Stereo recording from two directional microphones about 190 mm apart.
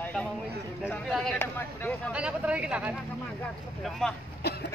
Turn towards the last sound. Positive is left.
turn(degrees=60)  # may be behind; listen again after turning